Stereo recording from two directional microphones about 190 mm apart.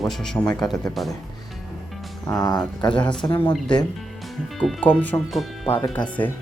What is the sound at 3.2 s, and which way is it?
Speech, 20° left (ahead or behind).